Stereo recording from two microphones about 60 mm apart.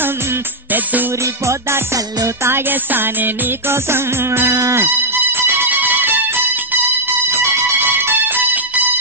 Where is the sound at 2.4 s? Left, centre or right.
Right.